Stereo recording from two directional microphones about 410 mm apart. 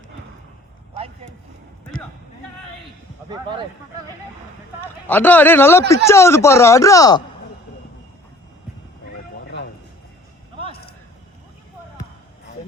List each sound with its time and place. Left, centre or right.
3.2 s speech: centre
4.8 s speech: centre
10.7 s a sound: left